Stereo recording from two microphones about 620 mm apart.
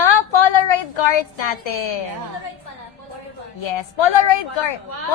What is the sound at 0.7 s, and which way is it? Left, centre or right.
A woman's voice, left.